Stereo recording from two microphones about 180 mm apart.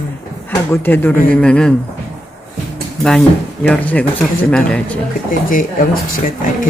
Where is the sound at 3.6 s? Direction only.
5° left (ahead or behind).